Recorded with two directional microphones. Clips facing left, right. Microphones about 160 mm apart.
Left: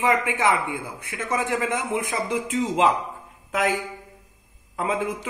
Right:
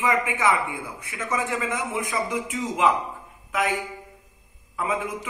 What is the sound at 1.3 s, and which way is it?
Speech, 20° left (ahead or behind).